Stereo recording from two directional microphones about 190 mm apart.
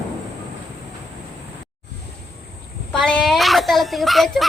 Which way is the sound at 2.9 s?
5° left (ahead or behind).